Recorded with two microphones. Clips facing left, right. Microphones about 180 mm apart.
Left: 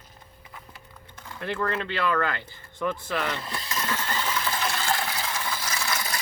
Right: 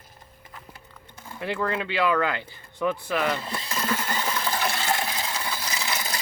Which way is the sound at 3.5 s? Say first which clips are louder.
Right 2 dB; 30° right (ahead or behind).